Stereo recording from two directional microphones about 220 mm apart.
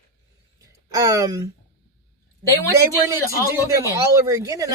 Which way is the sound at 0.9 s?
15° right (ahead or behind).